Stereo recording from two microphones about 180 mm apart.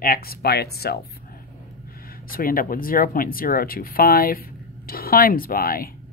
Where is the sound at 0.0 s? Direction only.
55° left (ahead or behind).